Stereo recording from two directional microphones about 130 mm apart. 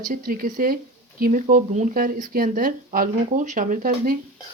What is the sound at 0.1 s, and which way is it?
Speech, 90° right.